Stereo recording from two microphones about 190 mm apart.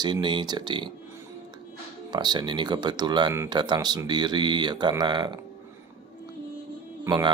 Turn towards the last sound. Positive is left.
turn(degrees=-20)  # may be behind; listen again after turning